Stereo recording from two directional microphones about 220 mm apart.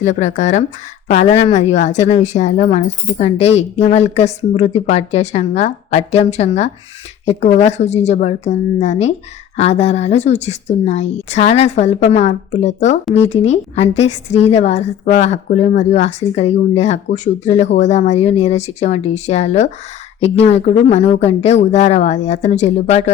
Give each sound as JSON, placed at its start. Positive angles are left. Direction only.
{"t": 0.0, "sound": "a woman's voice", "side_deg": 35}